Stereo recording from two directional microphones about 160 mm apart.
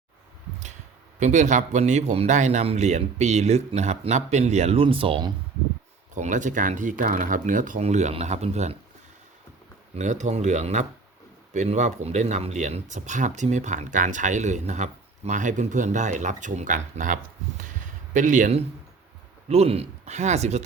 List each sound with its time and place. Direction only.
1.2 s speech: 50° right (ahead or behind)
6.1 s speech: 50° right (ahead or behind)
9.9 s speech: 50° right (ahead or behind)
19.5 s speech: 40° right (ahead or behind)